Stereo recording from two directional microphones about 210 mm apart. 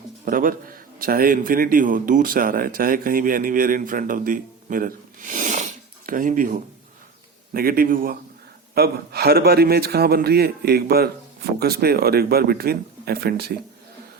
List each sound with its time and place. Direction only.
0.3 s a man's voice: 40° right (ahead or behind)